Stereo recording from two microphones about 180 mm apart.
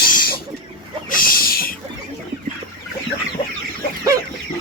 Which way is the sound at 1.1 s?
50° left (ahead or behind).